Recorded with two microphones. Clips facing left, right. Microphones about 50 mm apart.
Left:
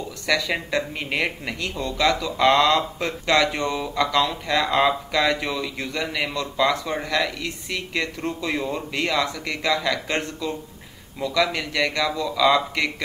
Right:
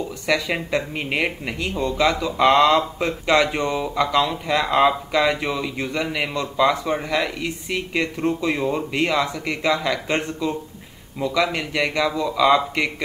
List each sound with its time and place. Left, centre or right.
0.3 s speech: centre